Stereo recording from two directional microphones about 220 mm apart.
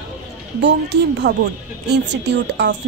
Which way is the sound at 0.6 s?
50° right (ahead or behind).